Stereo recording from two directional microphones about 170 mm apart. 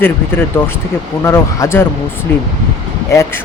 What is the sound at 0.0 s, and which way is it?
Speech, 15° left (ahead or behind).